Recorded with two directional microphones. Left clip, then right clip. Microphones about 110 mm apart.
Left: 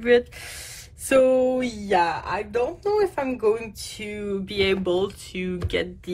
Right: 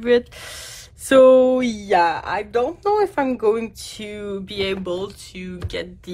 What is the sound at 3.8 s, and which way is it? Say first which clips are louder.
Speech: right 1 dB; 45° right (ahead or behind).